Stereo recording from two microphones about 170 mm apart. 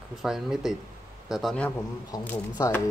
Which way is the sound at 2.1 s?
20° left (ahead or behind).